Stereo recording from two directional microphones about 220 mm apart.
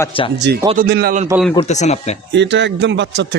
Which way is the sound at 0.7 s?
45° right (ahead or behind).